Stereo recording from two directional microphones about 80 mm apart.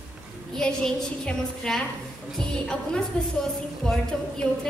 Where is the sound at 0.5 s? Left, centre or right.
Centre.